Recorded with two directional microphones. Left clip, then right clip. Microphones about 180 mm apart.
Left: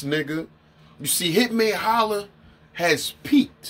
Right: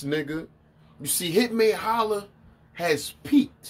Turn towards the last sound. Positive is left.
turn(degrees=10)  # may be behind; listen again after turning